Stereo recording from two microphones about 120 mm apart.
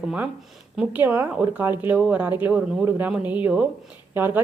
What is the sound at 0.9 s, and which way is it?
A woman's voice, 15° right (ahead or behind).